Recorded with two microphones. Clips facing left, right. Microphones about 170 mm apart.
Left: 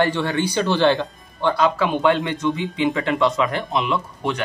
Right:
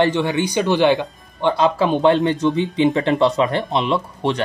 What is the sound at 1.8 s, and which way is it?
Speech, 30° right (ahead or behind).